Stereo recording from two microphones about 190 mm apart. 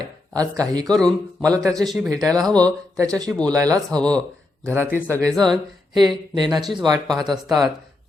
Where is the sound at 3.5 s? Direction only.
20° right (ahead or behind).